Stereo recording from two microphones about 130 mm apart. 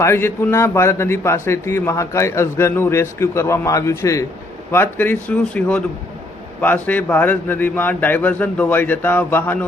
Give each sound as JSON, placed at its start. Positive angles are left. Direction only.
{"t": 0.0, "sound": "a man's voice", "side_deg": 20}